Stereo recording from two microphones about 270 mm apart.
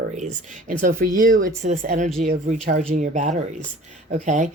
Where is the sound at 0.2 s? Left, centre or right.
Right.